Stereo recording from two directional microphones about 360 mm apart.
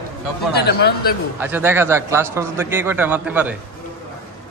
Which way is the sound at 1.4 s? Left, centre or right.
Centre.